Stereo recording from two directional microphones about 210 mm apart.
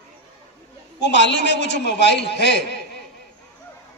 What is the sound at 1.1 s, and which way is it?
A man's voice, 55° left (ahead or behind).